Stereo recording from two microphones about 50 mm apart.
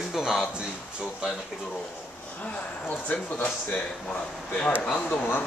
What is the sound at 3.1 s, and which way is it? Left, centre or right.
Speech, left.